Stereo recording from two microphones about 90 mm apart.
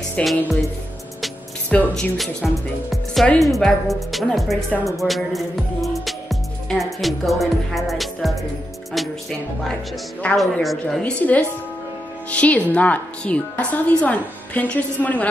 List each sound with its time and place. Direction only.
0.2 s a woman's voice: 10° left (ahead or behind)
1.7 s a woman's voice: 15° left (ahead or behind)
2.1 s speech: centre (ahead or behind)
10.3 s speech: centre (ahead or behind)
11.0 s a woman's voice: 15° left (ahead or behind)